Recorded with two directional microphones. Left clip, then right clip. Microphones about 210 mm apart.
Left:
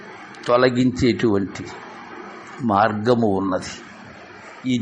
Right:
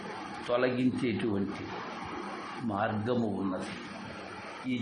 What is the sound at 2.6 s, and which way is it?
Speech, 35° left (ahead or behind).